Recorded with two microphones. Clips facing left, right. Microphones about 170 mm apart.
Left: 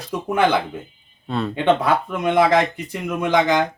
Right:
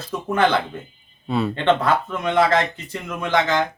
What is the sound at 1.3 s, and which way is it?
Speech, 5° right (ahead or behind).